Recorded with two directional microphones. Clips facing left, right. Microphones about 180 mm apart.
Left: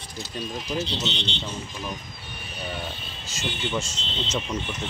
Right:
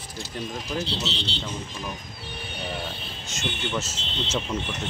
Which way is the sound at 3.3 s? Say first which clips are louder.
Left 1 dB; centre (ahead or behind).